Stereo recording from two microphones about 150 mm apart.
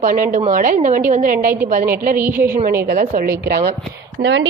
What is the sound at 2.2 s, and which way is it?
Speech, 15° right (ahead or behind).